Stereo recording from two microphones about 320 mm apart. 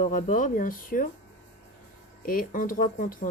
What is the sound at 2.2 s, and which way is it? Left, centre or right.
Speech, left.